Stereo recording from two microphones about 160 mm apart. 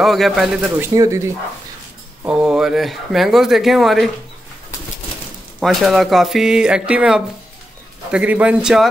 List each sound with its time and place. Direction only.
0.0 s speech: centre (ahead or behind)
0.9 s speech: 20° right (ahead or behind)
2.2 s speech: 5° right (ahead or behind)
5.6 s a man's voice: centre (ahead or behind)